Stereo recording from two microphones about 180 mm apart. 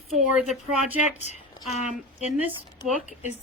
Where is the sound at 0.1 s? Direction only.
5° right (ahead or behind).